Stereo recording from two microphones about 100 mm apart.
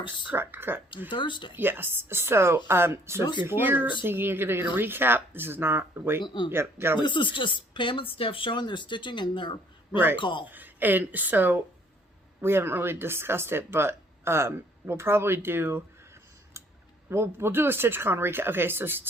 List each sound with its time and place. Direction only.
0.3 s speech: 20° right (ahead or behind)
1.1 s speech: 55° left (ahead or behind)
1.5 s speech: 20° right (ahead or behind)
6.1 s speech: 50° left (ahead or behind)
6.5 s speech: 25° right (ahead or behind)
7.0 s speech: 55° left (ahead or behind)
10.5 s speech: 20° right (ahead or behind)
16.6 s clicking: 25° right (ahead or behind)
17.1 s speech: 25° right (ahead or behind)